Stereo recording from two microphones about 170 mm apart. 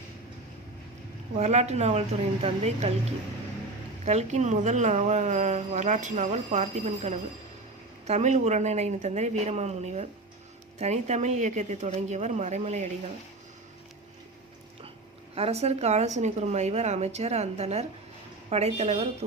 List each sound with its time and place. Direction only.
1.4 s speech: 40° right (ahead or behind)
4.0 s a woman's voice: 40° right (ahead or behind)
15.4 s speech: 40° right (ahead or behind)